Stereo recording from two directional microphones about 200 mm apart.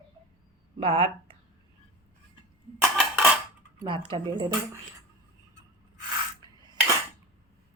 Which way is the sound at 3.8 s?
25° right (ahead or behind).